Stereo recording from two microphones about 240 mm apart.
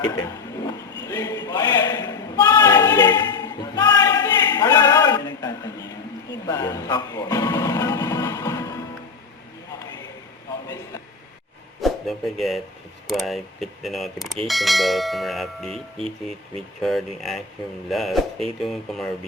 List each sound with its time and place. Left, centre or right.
0.0 s a sound: centre
6.4 s speech: centre
11.8 s speech: centre